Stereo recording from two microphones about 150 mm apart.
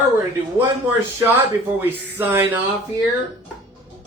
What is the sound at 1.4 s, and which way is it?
A man's voice, 15° right (ahead or behind).